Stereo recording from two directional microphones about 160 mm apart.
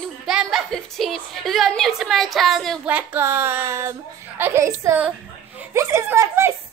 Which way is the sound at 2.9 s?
10° right (ahead or behind).